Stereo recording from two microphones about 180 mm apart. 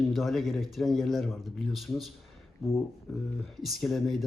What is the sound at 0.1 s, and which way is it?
Speech, centre (ahead or behind).